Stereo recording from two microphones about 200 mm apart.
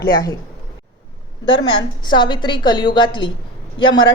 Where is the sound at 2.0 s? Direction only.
25° left (ahead or behind).